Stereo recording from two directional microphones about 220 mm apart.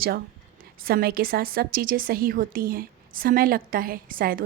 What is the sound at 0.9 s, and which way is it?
A woman's voice, 45° right (ahead or behind).